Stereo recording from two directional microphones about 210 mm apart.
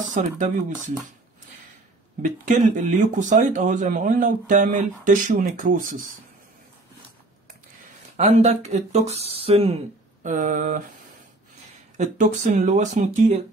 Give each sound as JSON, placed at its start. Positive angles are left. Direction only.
{"t": 0.1, "sound": "speech", "side_deg": -35}
{"t": 2.2, "sound": "speech", "side_deg": -40}
{"t": 8.2, "sound": "speech", "side_deg": -35}
{"t": 12.0, "sound": "speech", "side_deg": -35}